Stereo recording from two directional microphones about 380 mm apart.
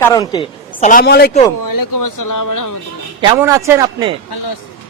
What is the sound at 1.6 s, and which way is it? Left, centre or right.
Speech, left.